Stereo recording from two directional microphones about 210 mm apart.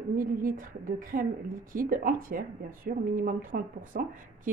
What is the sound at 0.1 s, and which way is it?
A woman's voice, 40° right (ahead or behind).